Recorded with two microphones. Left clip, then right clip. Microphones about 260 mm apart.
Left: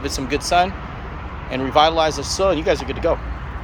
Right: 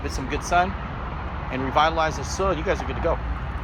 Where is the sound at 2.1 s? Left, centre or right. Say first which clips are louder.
Left 6 dB; left.